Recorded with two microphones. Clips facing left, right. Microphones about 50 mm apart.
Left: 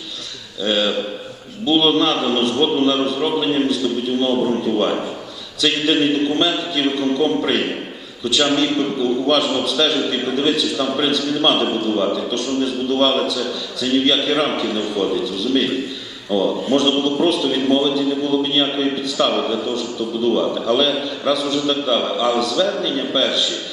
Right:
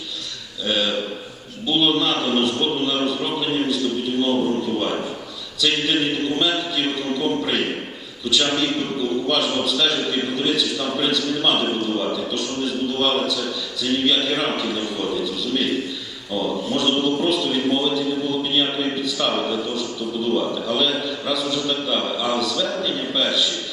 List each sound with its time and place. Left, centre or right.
0.6 s a man's voice: centre
3.2 s a man's voice: centre
3.4 s a man's voice: centre
16.7 s a man's voice: centre